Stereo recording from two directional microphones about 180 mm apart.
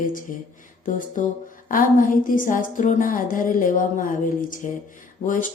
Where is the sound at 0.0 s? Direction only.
50° left (ahead or behind).